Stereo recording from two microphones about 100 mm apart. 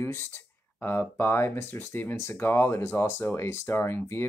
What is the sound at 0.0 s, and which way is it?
Speech, 25° left (ahead or behind).